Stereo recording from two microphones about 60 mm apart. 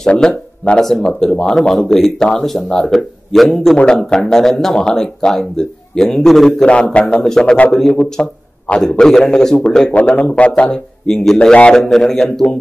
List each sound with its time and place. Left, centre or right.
0.2 s speech: centre
6.6 s a man's voice: centre
8.8 s a man's voice: centre
11.8 s speech: centre